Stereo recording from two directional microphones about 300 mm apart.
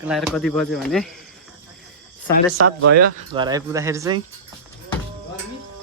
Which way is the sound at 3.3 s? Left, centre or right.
Centre.